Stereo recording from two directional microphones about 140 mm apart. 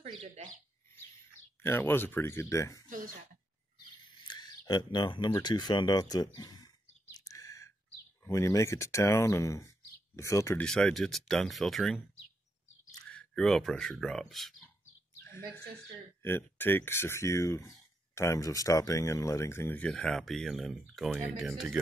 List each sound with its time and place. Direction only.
0.0 s a sound: 50° right (ahead or behind)
1.6 s speech: 15° left (ahead or behind)
7.2 s sigh: 25° left (ahead or behind)
8.2 s speech: 20° left (ahead or behind)
10.6 s speech: 5° left (ahead or behind)
13.0 s speech: 5° left (ahead or behind)
16.2 s speech: 15° left (ahead or behind); by 21.7 s centre (ahead or behind)